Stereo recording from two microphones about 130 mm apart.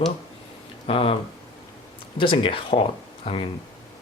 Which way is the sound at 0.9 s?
45° left (ahead or behind).